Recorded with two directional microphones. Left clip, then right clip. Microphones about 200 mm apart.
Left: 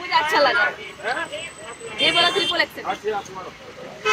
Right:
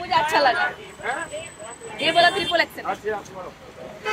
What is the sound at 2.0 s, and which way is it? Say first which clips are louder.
Speech: even; 5° right (ahead or behind).